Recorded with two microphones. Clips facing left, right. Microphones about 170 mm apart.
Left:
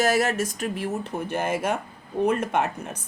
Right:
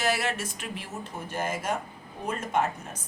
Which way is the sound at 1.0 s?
65° left (ahead or behind).